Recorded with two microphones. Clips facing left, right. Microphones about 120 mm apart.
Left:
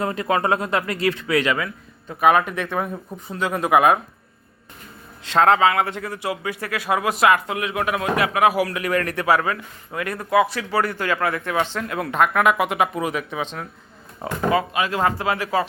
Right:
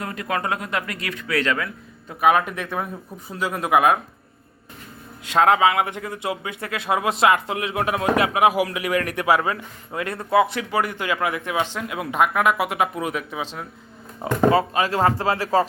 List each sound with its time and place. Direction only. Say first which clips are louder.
0.0 s speech: left 5 dB; 30° left (ahead or behind)
1.4 s a man's voice: left 2 dB; 10° left (ahead or behind)
5.2 s speech: left 1 dB; 15° right (ahead or behind)
14.5 s speech: right 1 dB; 35° right (ahead or behind)